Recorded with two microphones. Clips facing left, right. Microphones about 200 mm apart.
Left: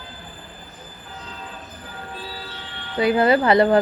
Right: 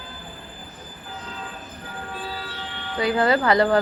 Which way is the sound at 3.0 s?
25° left (ahead or behind).